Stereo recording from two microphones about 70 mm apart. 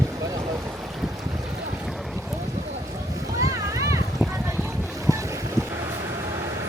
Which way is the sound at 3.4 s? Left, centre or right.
Right.